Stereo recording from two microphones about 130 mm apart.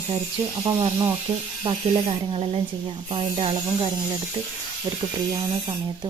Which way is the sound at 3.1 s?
45° right (ahead or behind).